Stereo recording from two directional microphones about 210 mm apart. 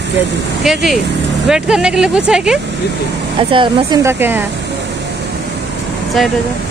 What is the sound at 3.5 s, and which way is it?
Speech, 20° right (ahead or behind).